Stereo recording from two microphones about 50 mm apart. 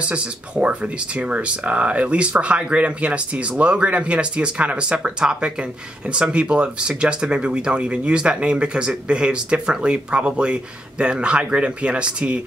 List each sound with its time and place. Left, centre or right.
0.0 s speech: right